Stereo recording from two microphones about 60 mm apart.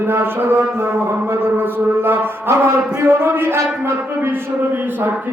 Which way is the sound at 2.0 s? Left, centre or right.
Right.